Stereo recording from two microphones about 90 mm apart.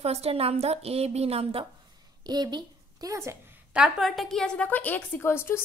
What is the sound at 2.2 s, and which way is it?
A woman's voice, 50° right (ahead or behind).